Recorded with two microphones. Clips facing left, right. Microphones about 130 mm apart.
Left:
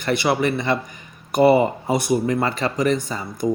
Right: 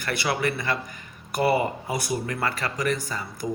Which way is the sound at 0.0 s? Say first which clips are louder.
Left 6 dB; 20° left (ahead or behind).